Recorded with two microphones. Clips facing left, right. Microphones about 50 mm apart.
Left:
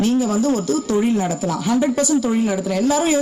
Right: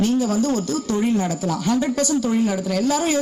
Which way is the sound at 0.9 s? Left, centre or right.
Centre.